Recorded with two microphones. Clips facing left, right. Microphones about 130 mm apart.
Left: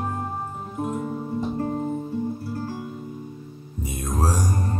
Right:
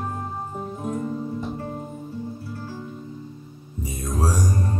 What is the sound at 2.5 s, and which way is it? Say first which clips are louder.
Music: left 5 dB; 45° left (ahead or behind).